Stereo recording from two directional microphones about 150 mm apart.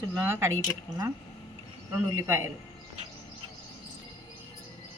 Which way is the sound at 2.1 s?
15° right (ahead or behind).